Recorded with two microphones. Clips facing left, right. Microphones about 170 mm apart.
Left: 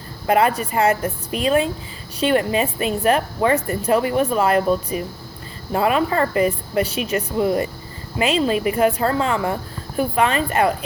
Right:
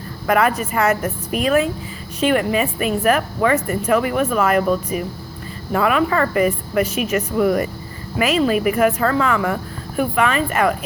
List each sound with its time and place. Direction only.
0.3 s a woman's voice: 30° left (ahead or behind)